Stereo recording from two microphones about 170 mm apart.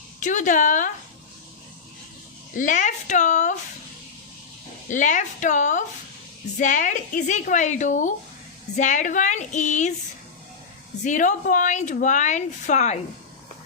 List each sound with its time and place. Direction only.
0.2 s a woman's voice: 45° left (ahead or behind)
2.6 s a woman's voice: 50° left (ahead or behind)
4.9 s a woman's voice: 45° left (ahead or behind)
11.0 s a woman's voice: 45° left (ahead or behind)